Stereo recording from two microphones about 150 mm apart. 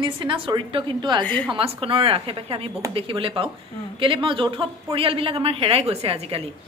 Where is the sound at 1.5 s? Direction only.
35° right (ahead or behind).